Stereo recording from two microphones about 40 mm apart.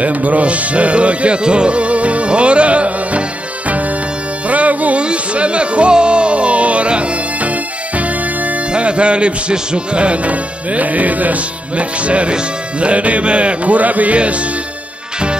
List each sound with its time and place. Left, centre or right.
0.0 s music: right
8.7 s speech: right